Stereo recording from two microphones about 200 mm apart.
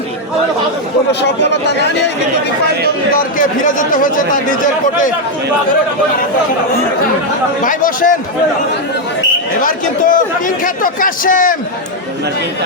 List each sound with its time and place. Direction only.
3.3 s speech: 40° left (ahead or behind)
7.6 s speech: 40° left (ahead or behind)
9.6 s a man's voice: 45° left (ahead or behind)